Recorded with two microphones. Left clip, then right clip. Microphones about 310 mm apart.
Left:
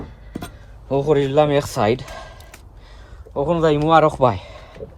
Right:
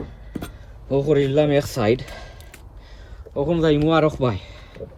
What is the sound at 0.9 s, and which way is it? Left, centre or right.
Speech, centre.